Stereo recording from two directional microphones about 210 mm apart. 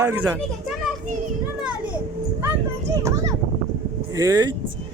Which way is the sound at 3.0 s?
15° right (ahead or behind).